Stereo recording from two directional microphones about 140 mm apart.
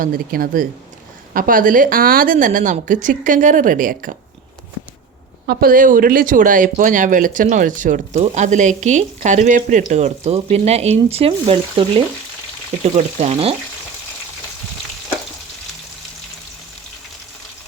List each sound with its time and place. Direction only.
0.0 s a woman's voice: 90° right
5.5 s a woman's voice: 90° right; by 8.2 s 70° right (ahead or behind)
8.2 s speech: 60° right (ahead or behind)